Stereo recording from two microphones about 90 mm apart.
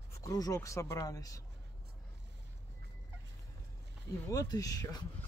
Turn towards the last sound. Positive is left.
turn(degrees=45)  # may be behind; listen again after turning